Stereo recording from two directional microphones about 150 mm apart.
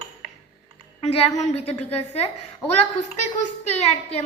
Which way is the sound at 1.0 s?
45° left (ahead or behind).